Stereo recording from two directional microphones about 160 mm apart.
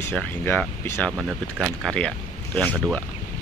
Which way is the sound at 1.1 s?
5° right (ahead or behind).